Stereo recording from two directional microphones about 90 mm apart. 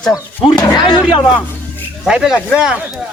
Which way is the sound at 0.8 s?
60° left (ahead or behind).